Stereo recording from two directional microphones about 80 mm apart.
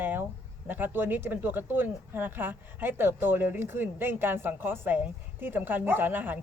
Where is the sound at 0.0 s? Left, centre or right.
Right.